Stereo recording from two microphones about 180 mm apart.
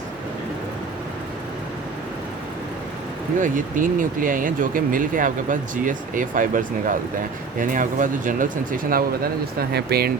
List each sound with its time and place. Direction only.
3.4 s speech: 45° right (ahead or behind)